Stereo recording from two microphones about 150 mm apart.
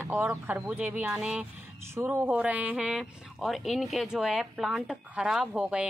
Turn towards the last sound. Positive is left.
turn(degrees=-5)  # may be behind; listen again after turning